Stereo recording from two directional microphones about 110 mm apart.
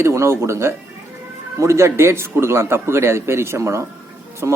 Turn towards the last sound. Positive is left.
turn(degrees=-25)  # may be behind; listen again after turning